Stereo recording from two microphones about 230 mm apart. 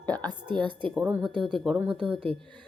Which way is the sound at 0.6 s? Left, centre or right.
Centre.